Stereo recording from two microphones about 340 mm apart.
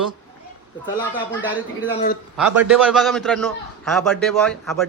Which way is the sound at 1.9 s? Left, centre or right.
Centre.